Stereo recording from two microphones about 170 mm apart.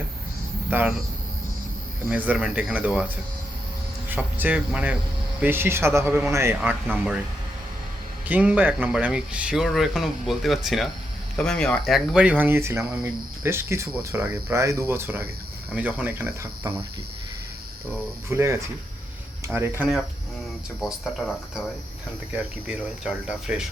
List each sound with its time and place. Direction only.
0.7 s speech: 10° right (ahead or behind)
2.0 s speech: 10° right (ahead or behind)
4.1 s speech: 10° right (ahead or behind)
8.3 s speech: 10° right (ahead or behind)
18.3 s speech: 15° right (ahead or behind)
20.8 s speech: centre (ahead or behind)
22.6 s speech: 5° right (ahead or behind)